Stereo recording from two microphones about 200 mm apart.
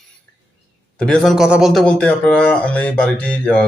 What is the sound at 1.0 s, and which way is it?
Speech, 5° left (ahead or behind).